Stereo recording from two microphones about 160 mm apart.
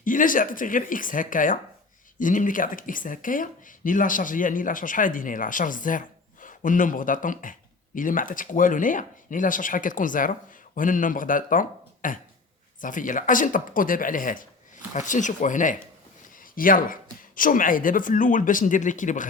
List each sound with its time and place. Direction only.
0.0 s speech: 55° left (ahead or behind)